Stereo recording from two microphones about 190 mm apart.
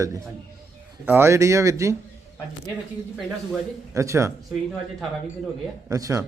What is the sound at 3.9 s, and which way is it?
Speech, 15° right (ahead or behind).